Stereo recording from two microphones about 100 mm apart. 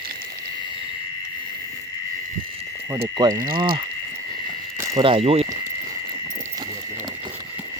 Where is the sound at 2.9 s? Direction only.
35° right (ahead or behind).